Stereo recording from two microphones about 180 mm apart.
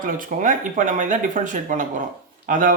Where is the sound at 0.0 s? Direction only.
50° right (ahead or behind).